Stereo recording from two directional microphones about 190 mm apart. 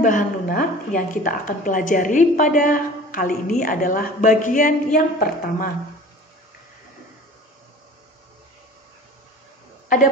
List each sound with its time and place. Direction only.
0.0 s a woman's voice: 45° left (ahead or behind)